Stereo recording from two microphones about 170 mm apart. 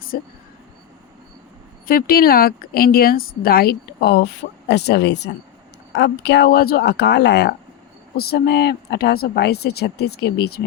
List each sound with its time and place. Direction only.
0.1 s speech: 60° left (ahead or behind)
1.9 s speech: 60° left (ahead or behind)